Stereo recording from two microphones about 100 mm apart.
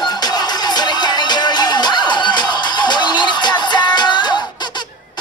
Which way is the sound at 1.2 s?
45° left (ahead or behind).